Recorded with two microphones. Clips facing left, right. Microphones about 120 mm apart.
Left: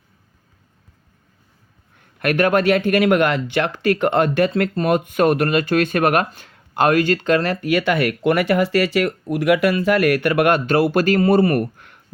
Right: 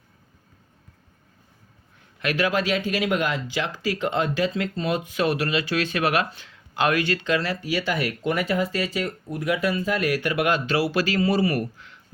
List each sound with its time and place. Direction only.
2.0 s speech: 55° left (ahead or behind)